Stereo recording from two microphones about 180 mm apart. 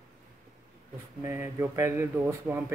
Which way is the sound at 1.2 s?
15° right (ahead or behind).